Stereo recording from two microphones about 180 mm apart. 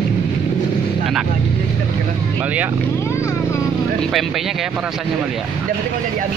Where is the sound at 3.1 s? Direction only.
15° left (ahead or behind).